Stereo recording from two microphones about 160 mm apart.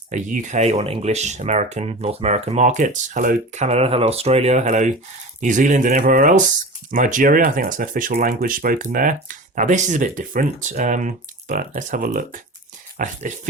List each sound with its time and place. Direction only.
0.1 s speech: 50° right (ahead or behind)